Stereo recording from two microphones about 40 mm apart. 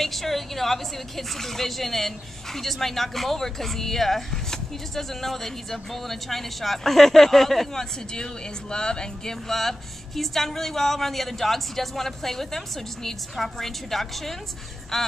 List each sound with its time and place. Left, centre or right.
0.0 s a woman's voice: centre
8.1 s a woman's voice: centre